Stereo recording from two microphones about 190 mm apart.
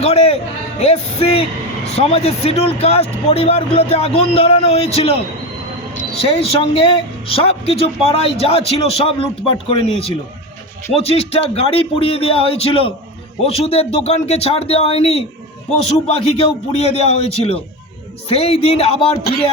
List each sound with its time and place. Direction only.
0.0 s speech: 35° left (ahead or behind)
6.2 s speech: 30° left (ahead or behind)